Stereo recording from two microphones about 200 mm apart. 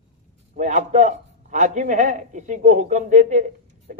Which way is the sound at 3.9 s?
45° right (ahead or behind).